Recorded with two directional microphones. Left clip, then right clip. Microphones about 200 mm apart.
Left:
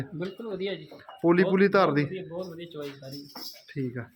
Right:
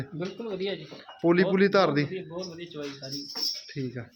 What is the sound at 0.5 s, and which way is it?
Speech, 5° right (ahead or behind).